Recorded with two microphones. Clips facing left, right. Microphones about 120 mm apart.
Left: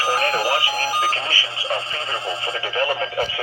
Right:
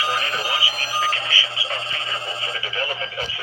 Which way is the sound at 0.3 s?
60° left (ahead or behind).